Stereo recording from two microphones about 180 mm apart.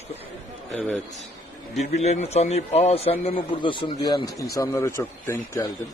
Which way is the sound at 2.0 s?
35° left (ahead or behind).